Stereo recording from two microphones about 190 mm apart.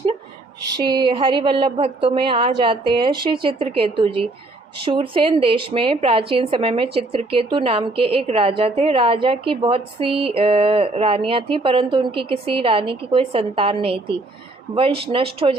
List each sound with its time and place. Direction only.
0.8 s speech: 20° right (ahead or behind)